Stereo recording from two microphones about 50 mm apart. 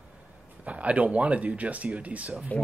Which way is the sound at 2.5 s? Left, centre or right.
Left.